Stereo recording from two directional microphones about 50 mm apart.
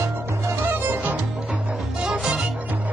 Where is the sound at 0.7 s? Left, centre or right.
Right.